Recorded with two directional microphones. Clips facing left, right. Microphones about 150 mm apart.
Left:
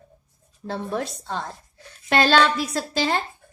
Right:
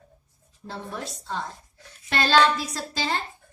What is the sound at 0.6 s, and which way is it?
A woman's voice, 65° left (ahead or behind).